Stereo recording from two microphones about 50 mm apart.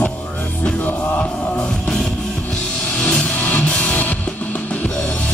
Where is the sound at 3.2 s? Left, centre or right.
Left.